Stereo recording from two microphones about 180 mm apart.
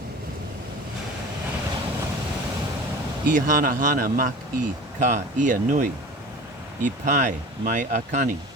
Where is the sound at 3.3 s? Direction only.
50° right (ahead or behind).